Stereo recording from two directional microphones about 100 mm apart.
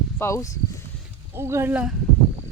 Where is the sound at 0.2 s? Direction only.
30° left (ahead or behind).